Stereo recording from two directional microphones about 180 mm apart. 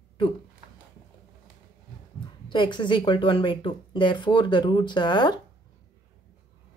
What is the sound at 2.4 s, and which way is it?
Speech, 25° left (ahead or behind).